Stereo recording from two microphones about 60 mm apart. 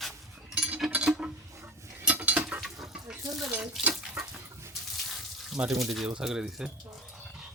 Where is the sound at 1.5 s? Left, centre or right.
Right.